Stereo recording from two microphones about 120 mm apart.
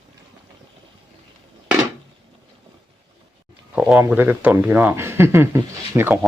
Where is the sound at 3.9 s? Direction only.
15° right (ahead or behind).